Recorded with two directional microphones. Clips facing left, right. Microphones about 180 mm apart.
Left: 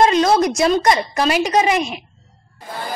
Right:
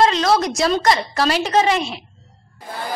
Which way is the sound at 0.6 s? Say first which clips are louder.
Left 2 dB; 20° left (ahead or behind).